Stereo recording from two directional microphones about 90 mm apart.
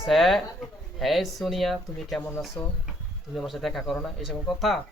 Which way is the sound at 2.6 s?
15° left (ahead or behind).